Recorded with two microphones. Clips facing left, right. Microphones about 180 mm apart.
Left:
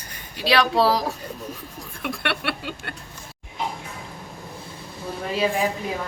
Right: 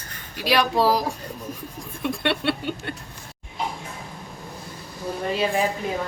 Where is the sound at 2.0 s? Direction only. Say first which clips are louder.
Right 3 dB; 20° right (ahead or behind).